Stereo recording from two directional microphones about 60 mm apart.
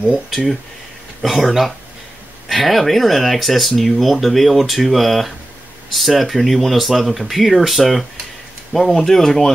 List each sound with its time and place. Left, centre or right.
0.3 s speech: centre